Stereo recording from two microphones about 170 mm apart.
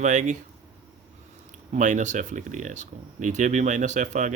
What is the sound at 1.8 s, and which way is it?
Speech, 45° right (ahead or behind).